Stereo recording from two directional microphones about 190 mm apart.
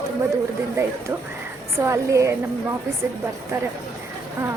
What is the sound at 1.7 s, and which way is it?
Speech, 15° right (ahead or behind).